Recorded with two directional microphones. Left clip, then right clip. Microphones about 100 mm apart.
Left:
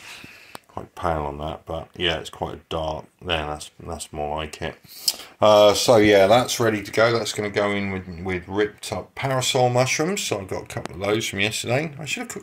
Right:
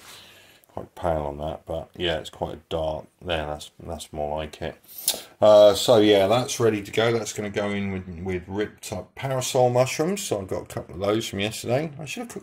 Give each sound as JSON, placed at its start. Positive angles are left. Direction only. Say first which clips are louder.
{"t": 0.9, "sound": "speech", "louder": "left 1 dB", "side_deg": -15}
{"t": 6.7, "sound": "speech", "louder": "left 3 dB", "side_deg": -20}
{"t": 10.4, "sound": "speech", "louder": "left 1 dB", "side_deg": -40}
{"t": 11.3, "sound": "speech", "louder": "left 3 dB", "side_deg": -30}